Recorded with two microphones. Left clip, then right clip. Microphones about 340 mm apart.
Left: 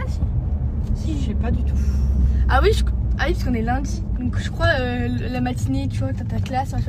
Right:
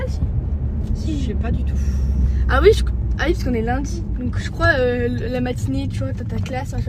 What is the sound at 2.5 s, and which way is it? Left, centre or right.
Speech, centre.